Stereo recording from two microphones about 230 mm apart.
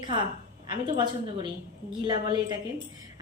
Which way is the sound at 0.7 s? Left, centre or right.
Right.